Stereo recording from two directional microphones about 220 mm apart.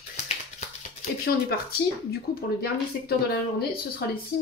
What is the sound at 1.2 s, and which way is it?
Speech, 45° left (ahead or behind).